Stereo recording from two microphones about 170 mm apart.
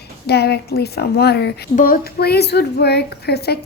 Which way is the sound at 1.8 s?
55° left (ahead or behind).